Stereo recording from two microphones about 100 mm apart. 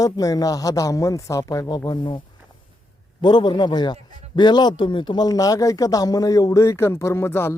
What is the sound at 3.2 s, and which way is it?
A man's voice, 50° left (ahead or behind).